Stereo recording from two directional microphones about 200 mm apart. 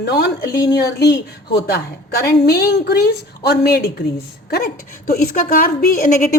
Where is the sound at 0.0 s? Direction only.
55° left (ahead or behind).